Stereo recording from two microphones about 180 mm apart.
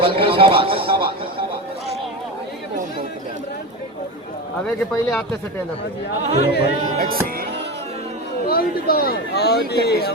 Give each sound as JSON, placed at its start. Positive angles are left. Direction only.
{"t": 0.0, "sound": "a man's voice", "side_deg": -30}
{"t": 4.6, "sound": "speech", "side_deg": 0}
{"t": 6.3, "sound": "speech", "side_deg": 60}
{"t": 6.9, "sound": "music", "side_deg": -50}
{"t": 8.4, "sound": "speech", "side_deg": 55}